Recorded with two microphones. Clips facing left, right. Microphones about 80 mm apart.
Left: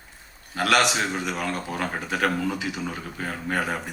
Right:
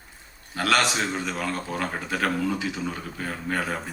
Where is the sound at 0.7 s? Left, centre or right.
Left.